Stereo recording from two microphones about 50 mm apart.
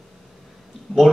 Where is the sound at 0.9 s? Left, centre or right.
Centre.